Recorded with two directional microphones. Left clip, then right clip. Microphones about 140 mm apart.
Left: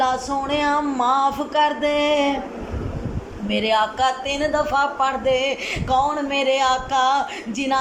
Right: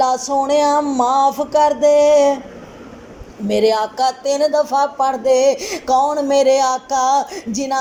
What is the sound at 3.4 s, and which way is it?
Speech, 35° right (ahead or behind).